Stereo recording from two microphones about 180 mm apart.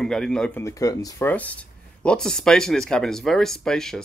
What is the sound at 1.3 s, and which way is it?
Speech, 10° left (ahead or behind).